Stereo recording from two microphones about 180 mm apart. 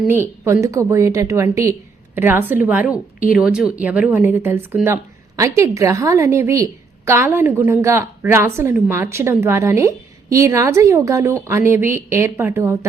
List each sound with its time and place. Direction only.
0.4 s a woman's voice: 15° right (ahead or behind)